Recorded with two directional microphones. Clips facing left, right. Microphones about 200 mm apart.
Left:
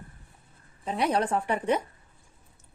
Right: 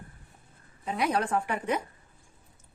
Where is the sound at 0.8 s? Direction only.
30° left (ahead or behind).